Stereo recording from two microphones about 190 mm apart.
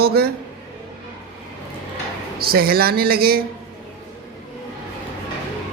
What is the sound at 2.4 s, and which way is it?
Speech, 55° right (ahead or behind).